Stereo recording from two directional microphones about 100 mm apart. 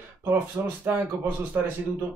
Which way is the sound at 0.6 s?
30° right (ahead or behind).